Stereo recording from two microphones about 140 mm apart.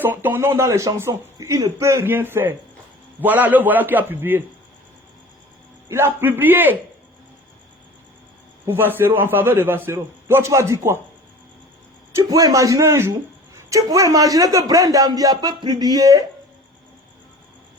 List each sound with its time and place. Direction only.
0.0 s speech: 15° right (ahead or behind)
5.9 s speech: 15° right (ahead or behind)
8.6 s speech: 15° right (ahead or behind)
12.1 s a man's voice: 25° right (ahead or behind)